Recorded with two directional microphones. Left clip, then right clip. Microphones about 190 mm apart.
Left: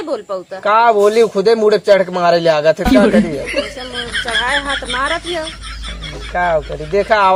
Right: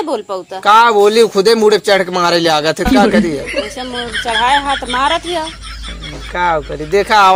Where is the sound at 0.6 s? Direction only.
20° right (ahead or behind).